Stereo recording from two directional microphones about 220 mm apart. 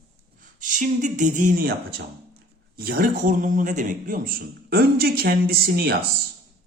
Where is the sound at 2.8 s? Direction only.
40° right (ahead or behind).